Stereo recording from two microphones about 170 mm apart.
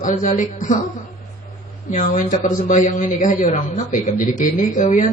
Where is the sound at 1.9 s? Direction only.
45° left (ahead or behind).